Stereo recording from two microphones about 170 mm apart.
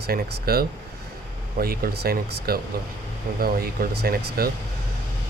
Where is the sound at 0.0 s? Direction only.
65° right (ahead or behind).